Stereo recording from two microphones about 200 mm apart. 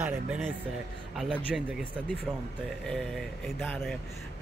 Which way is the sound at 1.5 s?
Centre (ahead or behind).